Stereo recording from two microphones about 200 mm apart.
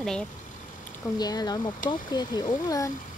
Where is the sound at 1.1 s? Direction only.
20° left (ahead or behind).